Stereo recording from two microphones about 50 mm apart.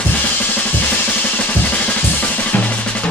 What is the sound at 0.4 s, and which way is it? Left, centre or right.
Drum, left.